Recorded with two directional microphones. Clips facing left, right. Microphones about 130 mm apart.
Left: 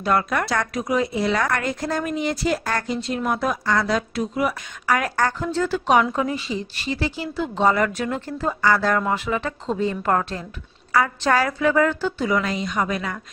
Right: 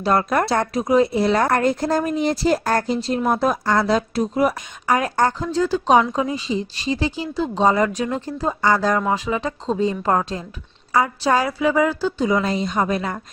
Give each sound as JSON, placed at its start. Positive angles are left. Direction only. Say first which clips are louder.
{"t": 0.0, "sound": "speech", "louder": "right 3 dB", "side_deg": -35}
{"t": 4.9, "sound": "a woman's voice", "louder": "right 3 dB", "side_deg": -25}
{"t": 5.4, "sound": "a woman's voice", "louder": "right 2 dB", "side_deg": -10}